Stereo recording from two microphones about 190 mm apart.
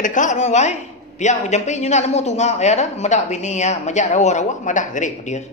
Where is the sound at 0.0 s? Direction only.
40° left (ahead or behind).